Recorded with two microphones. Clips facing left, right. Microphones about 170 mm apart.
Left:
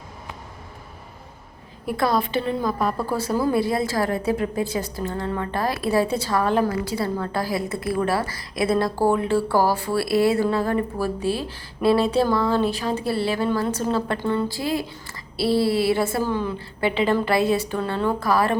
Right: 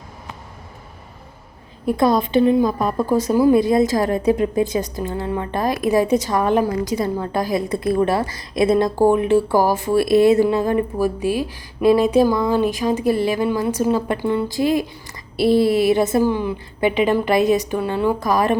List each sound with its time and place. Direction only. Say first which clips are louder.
1.9 s a woman's voice: right 5 dB; 20° right (ahead or behind)